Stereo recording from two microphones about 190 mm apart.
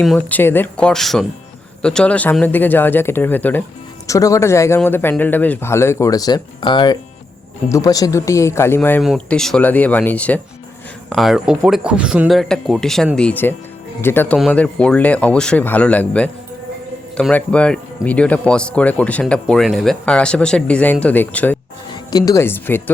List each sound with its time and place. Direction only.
0.0 s speech: 5° left (ahead or behind)